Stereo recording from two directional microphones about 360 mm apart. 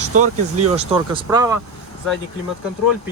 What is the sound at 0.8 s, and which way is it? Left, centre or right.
Speech, centre.